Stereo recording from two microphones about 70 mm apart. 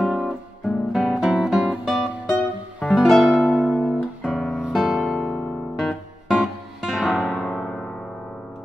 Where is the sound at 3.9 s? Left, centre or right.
Centre.